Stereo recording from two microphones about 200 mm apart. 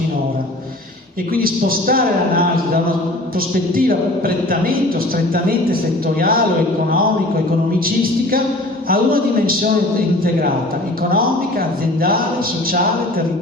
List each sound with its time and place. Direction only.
1.4 s a man's voice: 45° right (ahead or behind)
8.9 s a man's voice: 45° right (ahead or behind)